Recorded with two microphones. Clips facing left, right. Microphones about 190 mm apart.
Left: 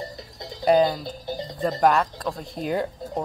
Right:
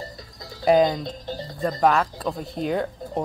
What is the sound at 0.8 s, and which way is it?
Music, 5° left (ahead or behind).